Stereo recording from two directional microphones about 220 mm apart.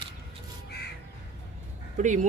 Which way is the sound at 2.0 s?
35° right (ahead or behind).